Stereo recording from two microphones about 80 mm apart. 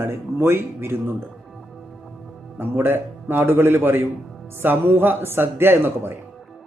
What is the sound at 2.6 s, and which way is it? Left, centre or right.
Speech, right.